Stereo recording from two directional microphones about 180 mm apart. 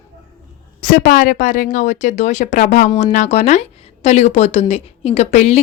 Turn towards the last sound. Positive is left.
turn(degrees=40)  # may be behind; listen again after turning